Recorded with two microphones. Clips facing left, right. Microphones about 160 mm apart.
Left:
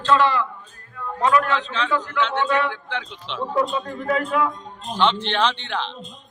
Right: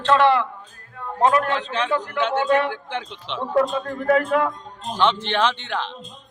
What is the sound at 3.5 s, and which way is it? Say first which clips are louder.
A man's voice: right 3 dB; 55° right (ahead or behind).